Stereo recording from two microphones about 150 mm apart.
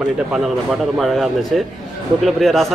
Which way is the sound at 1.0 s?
Centre (ahead or behind).